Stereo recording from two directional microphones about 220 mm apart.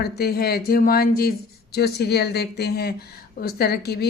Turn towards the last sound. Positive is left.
turn(degrees=45)  # may be behind; listen again after turning